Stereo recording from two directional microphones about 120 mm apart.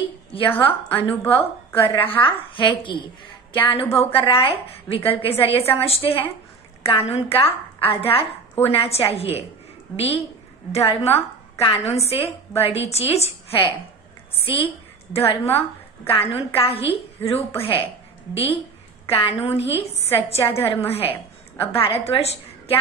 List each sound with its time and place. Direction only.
0.3 s a woman's voice: 50° left (ahead or behind)